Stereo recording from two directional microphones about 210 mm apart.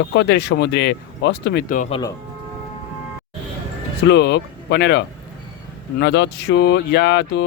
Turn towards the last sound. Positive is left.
turn(degrees=50)  # may be behind; listen again after turning